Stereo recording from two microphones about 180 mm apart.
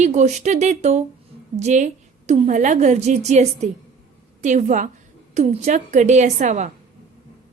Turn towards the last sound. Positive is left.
turn(degrees=-40)  # may be behind; listen again after turning